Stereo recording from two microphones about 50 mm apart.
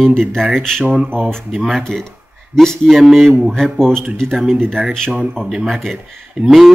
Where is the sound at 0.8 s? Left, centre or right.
Right.